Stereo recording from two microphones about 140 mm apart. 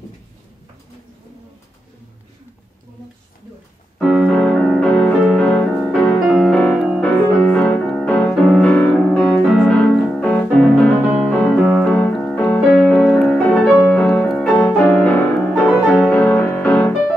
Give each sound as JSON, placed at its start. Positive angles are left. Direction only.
{"t": 4.0, "sound": "piano", "side_deg": -5}
{"t": 4.4, "sound": "music", "side_deg": 5}
{"t": 6.2, "sound": "piano", "side_deg": 0}
{"t": 11.2, "sound": "music", "side_deg": 10}